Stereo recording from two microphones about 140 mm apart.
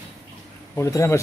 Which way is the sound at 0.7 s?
20° left (ahead or behind).